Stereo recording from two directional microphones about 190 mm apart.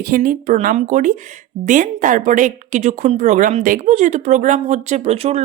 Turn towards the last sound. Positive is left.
turn(degrees=-35)  # may be behind; listen again after turning